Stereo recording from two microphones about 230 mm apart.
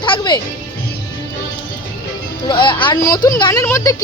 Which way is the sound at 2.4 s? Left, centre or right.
Left.